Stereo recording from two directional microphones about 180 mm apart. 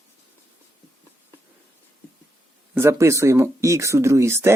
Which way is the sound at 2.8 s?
15° right (ahead or behind).